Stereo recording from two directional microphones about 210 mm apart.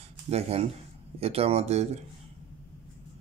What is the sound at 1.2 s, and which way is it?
Speech, 30° right (ahead or behind).